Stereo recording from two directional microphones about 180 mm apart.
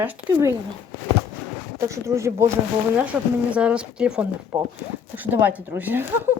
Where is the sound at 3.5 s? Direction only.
5° right (ahead or behind).